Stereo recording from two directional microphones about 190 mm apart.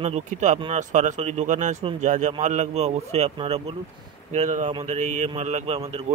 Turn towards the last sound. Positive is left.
turn(degrees=-35)  # may be behind; listen again after turning